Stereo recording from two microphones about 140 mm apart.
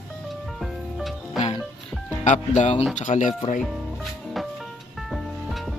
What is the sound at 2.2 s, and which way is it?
Speech, 60° left (ahead or behind).